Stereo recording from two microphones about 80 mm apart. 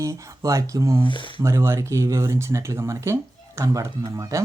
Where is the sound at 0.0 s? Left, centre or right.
Right.